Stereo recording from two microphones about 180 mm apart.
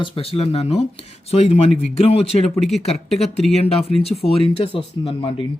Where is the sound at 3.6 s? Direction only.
35° left (ahead or behind).